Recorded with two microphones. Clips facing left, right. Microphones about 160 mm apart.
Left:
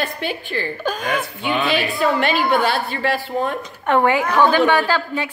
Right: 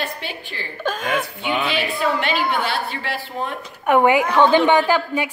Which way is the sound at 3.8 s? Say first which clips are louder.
Right 2 dB; 15° right (ahead or behind).